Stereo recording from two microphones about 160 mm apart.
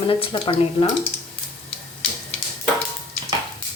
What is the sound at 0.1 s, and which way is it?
Speech, 35° left (ahead or behind).